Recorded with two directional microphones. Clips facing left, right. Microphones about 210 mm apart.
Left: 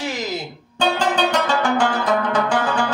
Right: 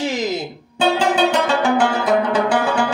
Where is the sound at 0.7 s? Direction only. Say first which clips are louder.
Right 3 dB; 10° right (ahead or behind).